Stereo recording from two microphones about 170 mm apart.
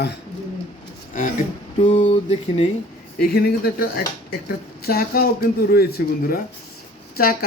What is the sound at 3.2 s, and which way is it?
Speech, 65° left (ahead or behind).